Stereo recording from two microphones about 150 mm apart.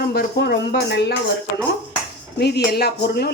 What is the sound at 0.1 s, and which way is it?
Speech, 90° left.